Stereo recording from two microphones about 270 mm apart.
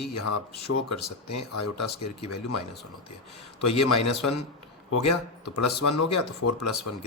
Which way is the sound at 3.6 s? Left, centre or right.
Left.